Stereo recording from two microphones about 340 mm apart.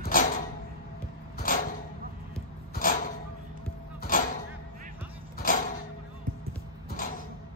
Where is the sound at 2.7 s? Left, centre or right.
Left.